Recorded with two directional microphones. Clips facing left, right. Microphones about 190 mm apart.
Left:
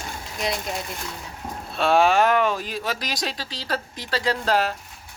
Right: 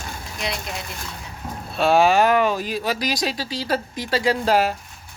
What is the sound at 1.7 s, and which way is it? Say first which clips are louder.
Speech: right 2 dB; 5° right (ahead or behind).